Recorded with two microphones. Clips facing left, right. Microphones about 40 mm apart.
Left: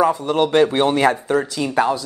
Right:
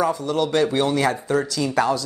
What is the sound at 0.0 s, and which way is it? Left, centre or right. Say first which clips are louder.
Speech: left 4 dB; left.